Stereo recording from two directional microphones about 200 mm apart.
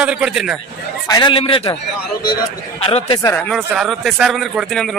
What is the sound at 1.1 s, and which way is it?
Speech, 20° left (ahead or behind).